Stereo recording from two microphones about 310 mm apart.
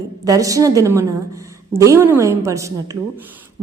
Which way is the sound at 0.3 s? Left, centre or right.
Centre.